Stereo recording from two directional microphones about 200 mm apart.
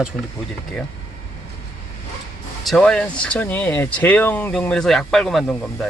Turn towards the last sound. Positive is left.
turn(degrees=0)  # may be behind; listen again after turning